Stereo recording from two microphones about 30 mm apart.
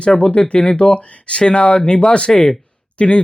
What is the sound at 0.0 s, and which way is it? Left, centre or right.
Speech, left.